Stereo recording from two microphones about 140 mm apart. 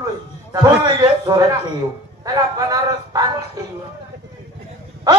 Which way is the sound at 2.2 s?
25° right (ahead or behind).